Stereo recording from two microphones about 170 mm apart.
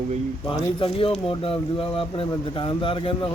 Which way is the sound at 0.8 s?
30° left (ahead or behind).